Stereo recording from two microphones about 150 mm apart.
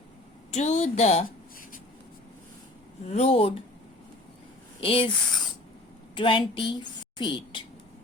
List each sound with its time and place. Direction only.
0.5 s a woman's voice: 50° left (ahead or behind)
3.1 s a woman's voice: 45° left (ahead or behind)
4.8 s a woman's voice: 35° left (ahead or behind)
6.1 s a woman's voice: 35° left (ahead or behind)